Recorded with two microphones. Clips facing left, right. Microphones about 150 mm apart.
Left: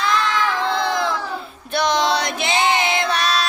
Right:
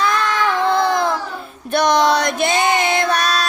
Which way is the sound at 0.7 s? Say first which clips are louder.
Right 4 dB; 50° right (ahead or behind).